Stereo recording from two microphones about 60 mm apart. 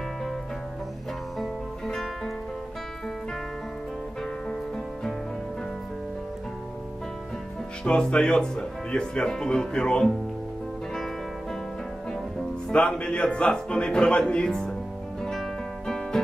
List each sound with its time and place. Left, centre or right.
1.4 s music: centre
7.8 s speech: centre
12.6 s speech: centre